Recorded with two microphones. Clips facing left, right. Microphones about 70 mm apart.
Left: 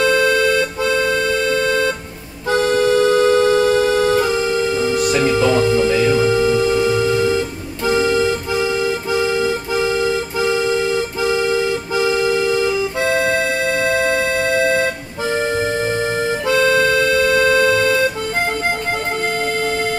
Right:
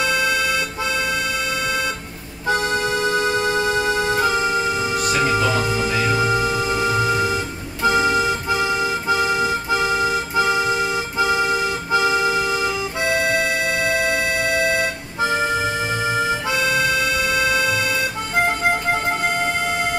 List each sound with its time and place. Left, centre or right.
0.0 s music: centre
2.5 s music: right
16.4 s music: centre